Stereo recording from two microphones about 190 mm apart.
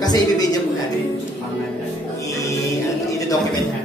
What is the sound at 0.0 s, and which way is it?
Speech, 20° left (ahead or behind).